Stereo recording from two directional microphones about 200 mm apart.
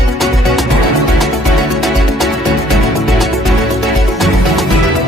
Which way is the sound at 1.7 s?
Centre (ahead or behind).